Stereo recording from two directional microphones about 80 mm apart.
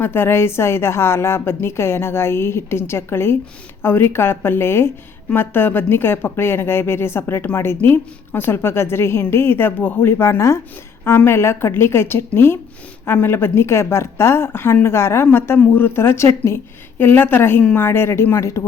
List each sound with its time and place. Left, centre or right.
0.0 s a woman's voice: left